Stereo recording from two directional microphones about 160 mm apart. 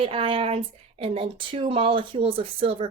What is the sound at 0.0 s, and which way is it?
Speech, 35° right (ahead or behind).